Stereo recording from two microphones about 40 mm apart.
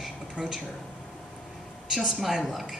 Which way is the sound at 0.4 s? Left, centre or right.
Right.